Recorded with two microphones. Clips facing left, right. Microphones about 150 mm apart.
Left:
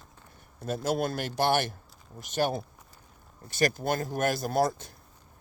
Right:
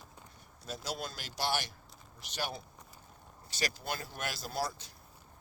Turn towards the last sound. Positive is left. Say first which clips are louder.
# left 10 dB
turn(degrees=50)  # may be behind; listen again after turning